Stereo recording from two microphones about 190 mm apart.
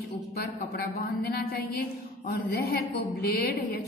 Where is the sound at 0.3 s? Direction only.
55° left (ahead or behind).